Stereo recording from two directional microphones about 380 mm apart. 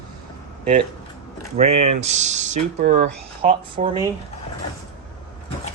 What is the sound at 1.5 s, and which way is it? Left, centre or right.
Speech, centre.